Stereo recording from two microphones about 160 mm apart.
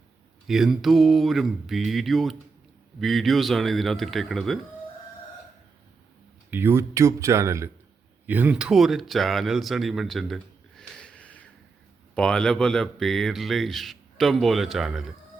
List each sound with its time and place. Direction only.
0.4 s speech: centre (ahead or behind)
6.5 s speech: 15° right (ahead or behind)